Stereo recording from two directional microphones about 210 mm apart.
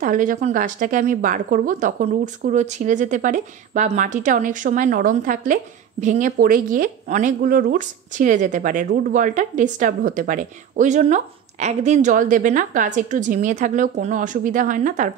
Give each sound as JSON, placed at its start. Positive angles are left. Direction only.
{"t": 0.0, "sound": "a woman's voice", "side_deg": -40}